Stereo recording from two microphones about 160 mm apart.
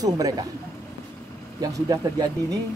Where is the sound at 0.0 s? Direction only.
25° right (ahead or behind).